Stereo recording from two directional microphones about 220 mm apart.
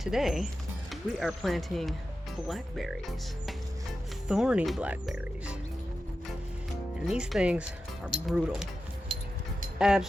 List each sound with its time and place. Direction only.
0.0 s speech: centre (ahead or behind)
4.3 s speech: 5° right (ahead or behind)
7.1 s speech: 5° right (ahead or behind)
9.1 s a sound: 25° right (ahead or behind)
9.7 s speech: 5° right (ahead or behind)